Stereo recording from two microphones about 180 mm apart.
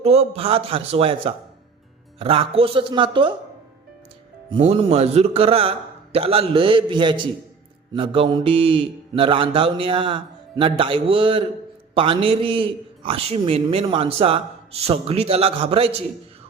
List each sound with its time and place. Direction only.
0.0 s a man's voice: 35° right (ahead or behind)
4.4 s a man's voice: 30° right (ahead or behind)